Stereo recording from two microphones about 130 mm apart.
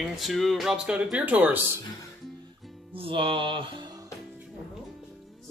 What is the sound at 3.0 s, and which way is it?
Music, 45° right (ahead or behind).